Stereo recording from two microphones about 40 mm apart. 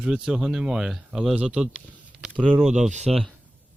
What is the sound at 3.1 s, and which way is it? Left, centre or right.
Speech, centre.